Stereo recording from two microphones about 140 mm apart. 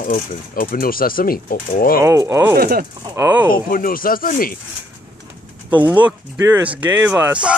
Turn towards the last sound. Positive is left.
turn(degrees=-10)  # may be behind; listen again after turning